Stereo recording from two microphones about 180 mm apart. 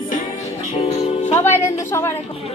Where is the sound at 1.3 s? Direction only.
15° left (ahead or behind).